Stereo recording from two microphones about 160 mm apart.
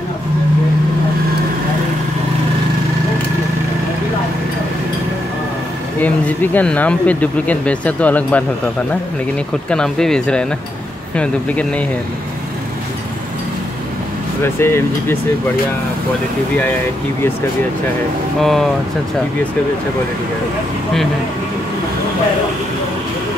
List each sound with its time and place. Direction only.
5.9 s speech: 10° left (ahead or behind)
9.7 s speech: 5° left (ahead or behind)
14.4 s speech: 15° left (ahead or behind)
18.4 s speech: centre (ahead or behind)